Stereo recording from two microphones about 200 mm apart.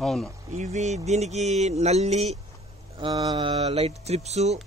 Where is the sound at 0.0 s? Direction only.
Centre (ahead or behind).